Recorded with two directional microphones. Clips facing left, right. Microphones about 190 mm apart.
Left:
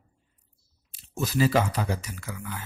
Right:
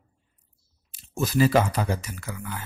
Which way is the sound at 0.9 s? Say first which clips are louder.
Right 3 dB; 50° right (ahead or behind).